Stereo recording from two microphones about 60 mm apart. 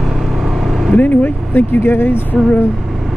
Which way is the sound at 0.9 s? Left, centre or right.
Left.